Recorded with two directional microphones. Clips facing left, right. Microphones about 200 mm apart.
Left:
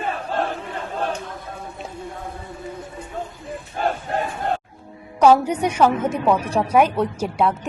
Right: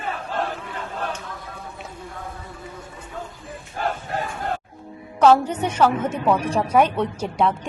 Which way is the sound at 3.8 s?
20° left (ahead or behind).